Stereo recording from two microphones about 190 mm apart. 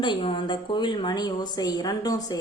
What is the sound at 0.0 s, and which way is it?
A woman's voice, 25° left (ahead or behind).